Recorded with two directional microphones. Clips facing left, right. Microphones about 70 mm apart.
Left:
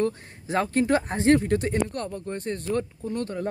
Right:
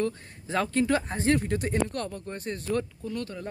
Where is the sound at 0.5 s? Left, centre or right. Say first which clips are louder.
Left 3 dB; left.